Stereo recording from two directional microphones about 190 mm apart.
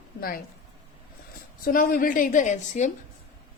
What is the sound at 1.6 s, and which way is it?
A woman's voice, 45° left (ahead or behind).